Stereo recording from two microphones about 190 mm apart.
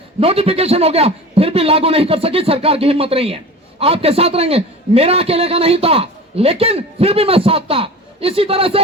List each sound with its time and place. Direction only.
0.2 s a man's voice: 30° right (ahead or behind)